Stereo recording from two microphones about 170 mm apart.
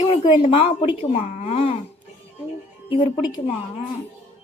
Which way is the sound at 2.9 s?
25° left (ahead or behind).